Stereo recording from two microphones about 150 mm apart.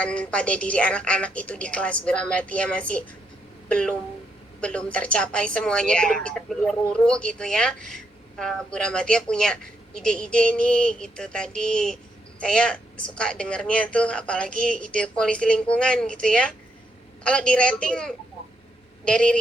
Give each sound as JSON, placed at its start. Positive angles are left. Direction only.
{"t": 0.0, "sound": "a woman's voice", "side_deg": 5}